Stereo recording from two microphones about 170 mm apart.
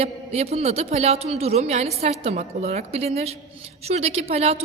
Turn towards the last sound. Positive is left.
turn(degrees=-40)  # may be behind; listen again after turning